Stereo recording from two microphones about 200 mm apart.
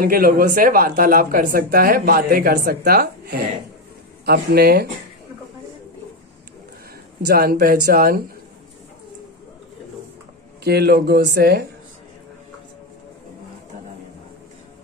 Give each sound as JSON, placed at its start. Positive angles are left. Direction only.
{"t": 0.0, "sound": "speech", "side_deg": -45}
{"t": 7.2, "sound": "speech", "side_deg": -50}
{"t": 10.6, "sound": "speech", "side_deg": -55}